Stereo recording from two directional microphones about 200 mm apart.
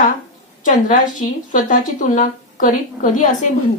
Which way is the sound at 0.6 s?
40° left (ahead or behind).